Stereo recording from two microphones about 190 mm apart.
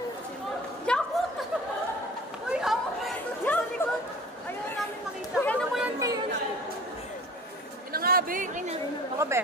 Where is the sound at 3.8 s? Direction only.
10° left (ahead or behind).